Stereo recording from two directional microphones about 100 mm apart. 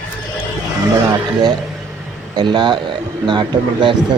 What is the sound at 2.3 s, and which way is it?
A man's voice, 50° right (ahead or behind).